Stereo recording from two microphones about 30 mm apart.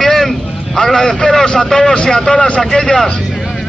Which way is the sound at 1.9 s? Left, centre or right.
Left.